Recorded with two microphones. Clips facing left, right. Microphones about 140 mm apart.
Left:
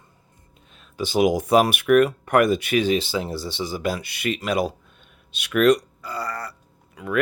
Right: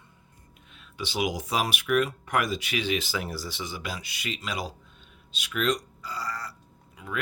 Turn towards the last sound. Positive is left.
turn(degrees=65)  # may be behind; listen again after turning